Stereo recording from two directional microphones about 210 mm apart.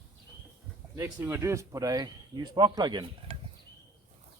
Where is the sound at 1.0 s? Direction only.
10° right (ahead or behind).